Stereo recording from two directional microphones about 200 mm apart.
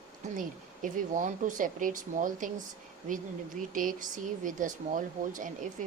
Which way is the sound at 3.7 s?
40° right (ahead or behind).